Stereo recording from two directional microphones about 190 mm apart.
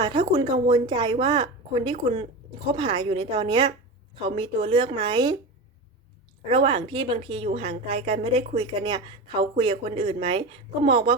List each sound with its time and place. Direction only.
0.0 s a woman's voice: 25° right (ahead or behind)
6.5 s a woman's voice: 25° right (ahead or behind)